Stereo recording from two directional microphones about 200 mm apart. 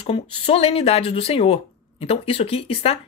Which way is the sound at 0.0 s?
30° left (ahead or behind).